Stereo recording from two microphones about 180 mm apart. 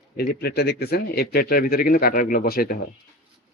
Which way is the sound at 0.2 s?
65° left (ahead or behind).